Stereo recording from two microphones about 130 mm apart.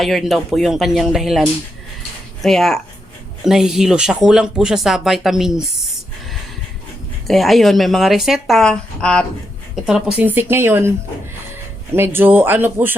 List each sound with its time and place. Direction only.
0.0 s speech: centre (ahead or behind)
7.3 s speech: centre (ahead or behind)
9.8 s speech: 5° right (ahead or behind)
11.9 s speech: 15° right (ahead or behind)